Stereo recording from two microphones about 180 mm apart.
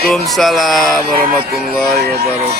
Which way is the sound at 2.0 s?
60° right (ahead or behind).